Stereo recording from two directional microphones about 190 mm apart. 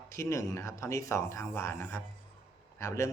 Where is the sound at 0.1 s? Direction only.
15° left (ahead or behind).